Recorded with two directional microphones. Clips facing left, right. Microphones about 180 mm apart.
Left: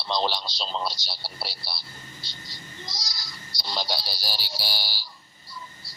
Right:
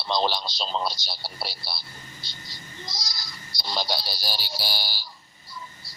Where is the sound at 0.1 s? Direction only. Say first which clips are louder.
Right 2 dB; 50° right (ahead or behind).